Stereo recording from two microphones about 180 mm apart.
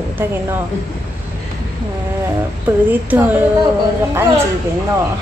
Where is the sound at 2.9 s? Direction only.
10° right (ahead or behind).